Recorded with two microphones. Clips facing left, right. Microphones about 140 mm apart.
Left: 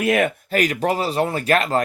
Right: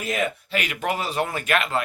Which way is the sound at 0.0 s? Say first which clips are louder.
Left 7 dB; 60° left (ahead or behind).